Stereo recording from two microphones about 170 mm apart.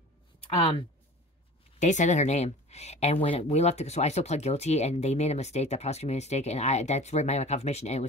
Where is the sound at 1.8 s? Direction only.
45° left (ahead or behind).